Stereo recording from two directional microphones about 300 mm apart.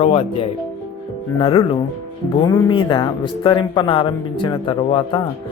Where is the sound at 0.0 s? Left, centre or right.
Centre.